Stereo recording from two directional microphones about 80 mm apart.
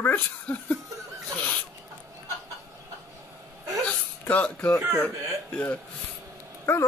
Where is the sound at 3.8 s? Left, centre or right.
Centre.